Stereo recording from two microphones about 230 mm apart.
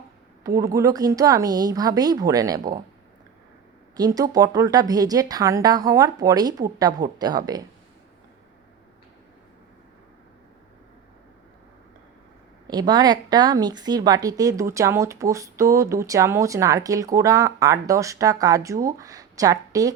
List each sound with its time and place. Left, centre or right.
0.4 s speech: centre
3.9 s speech: centre
12.6 s speech: centre